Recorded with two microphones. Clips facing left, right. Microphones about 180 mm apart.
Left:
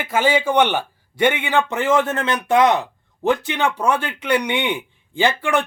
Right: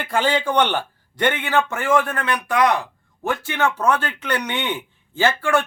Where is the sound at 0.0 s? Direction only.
10° left (ahead or behind).